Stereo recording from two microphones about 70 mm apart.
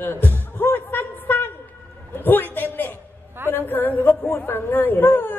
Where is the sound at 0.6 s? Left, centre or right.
Left.